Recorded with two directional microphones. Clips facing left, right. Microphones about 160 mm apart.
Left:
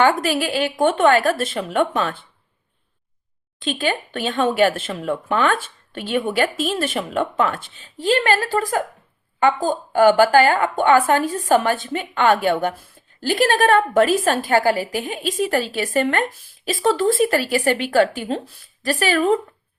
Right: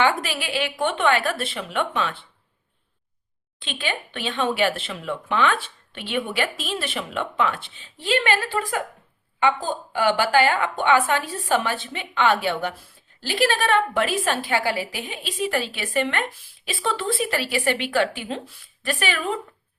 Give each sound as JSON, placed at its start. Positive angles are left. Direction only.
{"t": 0.0, "sound": "speech", "side_deg": 45}
{"t": 3.6, "sound": "a woman's voice", "side_deg": 40}